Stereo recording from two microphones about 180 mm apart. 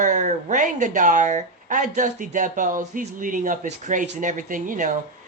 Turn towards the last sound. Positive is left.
turn(degrees=-50)  # may be behind; listen again after turning